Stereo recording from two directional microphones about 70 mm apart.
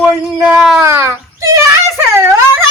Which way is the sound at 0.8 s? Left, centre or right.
Right.